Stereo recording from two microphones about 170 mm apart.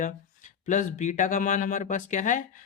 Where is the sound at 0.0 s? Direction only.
45° left (ahead or behind).